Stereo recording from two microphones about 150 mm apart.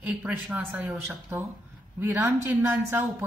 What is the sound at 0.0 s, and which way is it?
A woman's voice, 10° right (ahead or behind).